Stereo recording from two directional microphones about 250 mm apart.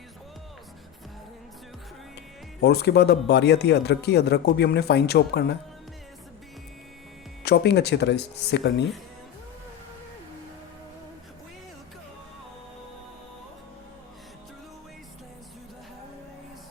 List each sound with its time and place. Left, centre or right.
2.6 s speech: left
7.4 s speech: left